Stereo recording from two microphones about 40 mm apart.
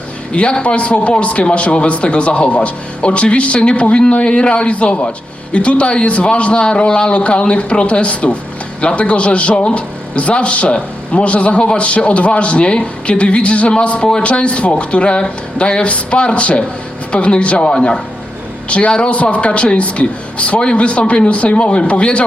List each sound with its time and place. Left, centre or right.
0.3 s a man's voice: left